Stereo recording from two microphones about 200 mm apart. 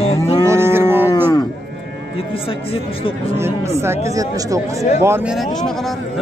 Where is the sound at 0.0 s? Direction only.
30° left (ahead or behind).